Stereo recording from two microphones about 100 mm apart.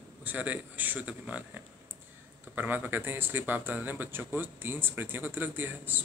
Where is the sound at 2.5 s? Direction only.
20° right (ahead or behind).